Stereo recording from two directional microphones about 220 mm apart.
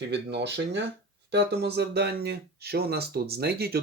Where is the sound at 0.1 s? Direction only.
50° right (ahead or behind).